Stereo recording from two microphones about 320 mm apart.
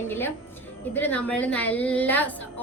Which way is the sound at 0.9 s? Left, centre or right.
Centre.